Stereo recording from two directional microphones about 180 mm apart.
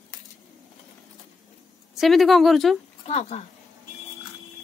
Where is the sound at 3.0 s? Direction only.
35° left (ahead or behind).